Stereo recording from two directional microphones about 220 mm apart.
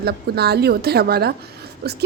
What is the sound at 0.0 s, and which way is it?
A woman's voice, 45° right (ahead or behind).